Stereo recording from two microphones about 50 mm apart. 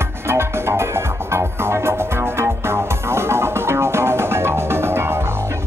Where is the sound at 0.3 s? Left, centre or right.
Right.